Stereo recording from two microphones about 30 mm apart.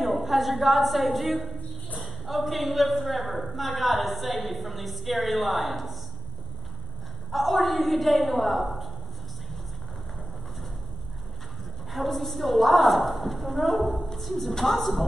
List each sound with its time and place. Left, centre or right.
0.0 s a woman's voice: centre
7.2 s a woman's voice: centre
11.9 s a woman's voice: centre